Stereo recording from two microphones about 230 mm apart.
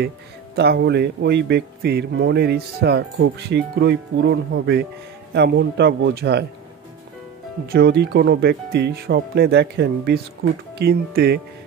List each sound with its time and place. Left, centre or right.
0.6 s speech: right
7.7 s speech: right